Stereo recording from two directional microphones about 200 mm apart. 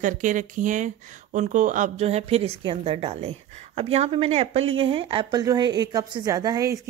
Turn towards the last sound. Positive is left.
turn(degrees=-15)  # may be behind; listen again after turning